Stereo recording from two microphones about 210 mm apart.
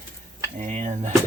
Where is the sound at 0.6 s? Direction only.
35° right (ahead or behind).